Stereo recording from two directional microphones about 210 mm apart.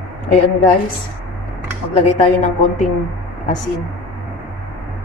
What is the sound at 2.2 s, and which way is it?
Speech, 35° left (ahead or behind).